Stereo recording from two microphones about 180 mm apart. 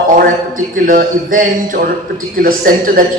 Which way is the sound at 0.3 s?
50° right (ahead or behind).